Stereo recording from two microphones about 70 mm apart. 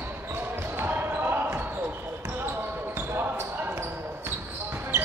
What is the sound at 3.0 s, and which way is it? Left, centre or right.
Basketball bounce, right.